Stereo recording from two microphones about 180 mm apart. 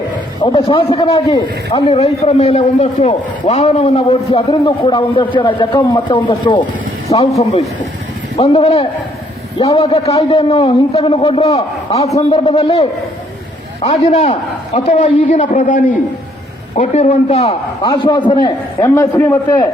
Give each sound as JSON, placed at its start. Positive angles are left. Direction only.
{"t": 0.5, "sound": "a man's voice", "side_deg": 30}
{"t": 8.4, "sound": "a man's voice", "side_deg": 35}
{"t": 17.8, "sound": "a man's voice", "side_deg": 25}